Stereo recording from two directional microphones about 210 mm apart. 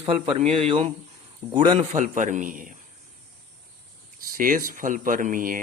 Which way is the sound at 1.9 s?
35° right (ahead or behind).